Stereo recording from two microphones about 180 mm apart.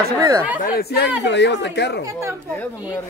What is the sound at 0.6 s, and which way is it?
Speech, 60° left (ahead or behind).